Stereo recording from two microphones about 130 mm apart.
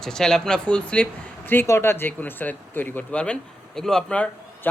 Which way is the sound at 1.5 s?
20° left (ahead or behind).